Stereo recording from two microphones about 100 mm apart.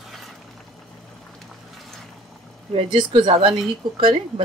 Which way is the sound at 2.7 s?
60° right (ahead or behind).